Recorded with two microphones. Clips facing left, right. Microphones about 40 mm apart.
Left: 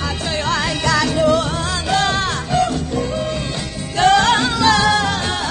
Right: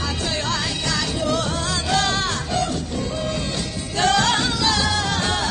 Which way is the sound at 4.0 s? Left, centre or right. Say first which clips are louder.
Left 6 dB; left.